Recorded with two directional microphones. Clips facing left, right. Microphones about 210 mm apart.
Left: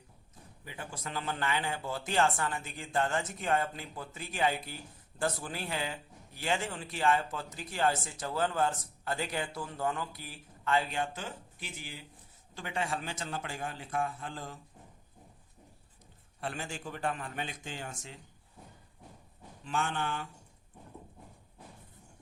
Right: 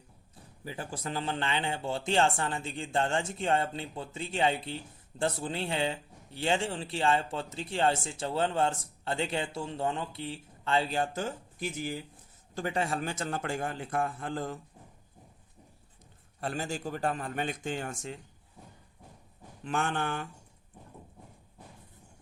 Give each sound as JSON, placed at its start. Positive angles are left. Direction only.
{"t": 0.6, "sound": "a man's voice", "side_deg": -35}
{"t": 16.4, "sound": "a man's voice", "side_deg": -40}
{"t": 19.6, "sound": "a man's voice", "side_deg": -55}